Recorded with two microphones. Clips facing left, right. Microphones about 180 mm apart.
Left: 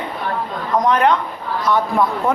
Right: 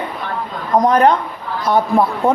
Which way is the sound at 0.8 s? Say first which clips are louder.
Right 3 dB; 35° right (ahead or behind).